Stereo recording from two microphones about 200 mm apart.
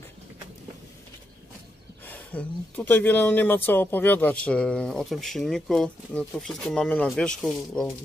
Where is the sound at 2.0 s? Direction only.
10° left (ahead or behind).